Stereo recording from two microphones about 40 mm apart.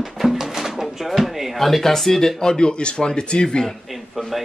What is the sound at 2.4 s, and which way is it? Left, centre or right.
Speech, centre.